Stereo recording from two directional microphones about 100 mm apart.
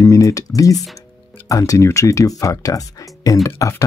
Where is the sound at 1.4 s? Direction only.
35° left (ahead or behind).